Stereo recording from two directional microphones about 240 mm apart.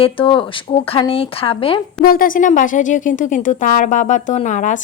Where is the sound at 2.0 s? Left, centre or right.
Left.